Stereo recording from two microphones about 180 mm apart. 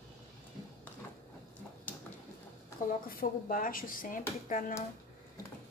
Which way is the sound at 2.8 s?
45° left (ahead or behind).